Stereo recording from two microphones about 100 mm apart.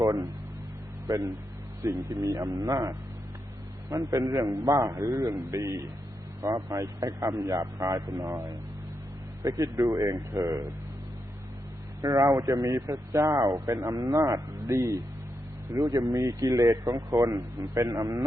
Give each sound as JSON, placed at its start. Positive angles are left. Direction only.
{"t": 0.0, "sound": "a man's voice", "side_deg": -35}
{"t": 12.0, "sound": "speech", "side_deg": -35}